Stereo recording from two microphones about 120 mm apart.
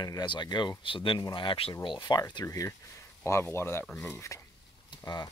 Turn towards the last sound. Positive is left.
turn(degrees=35)  # may be behind; listen again after turning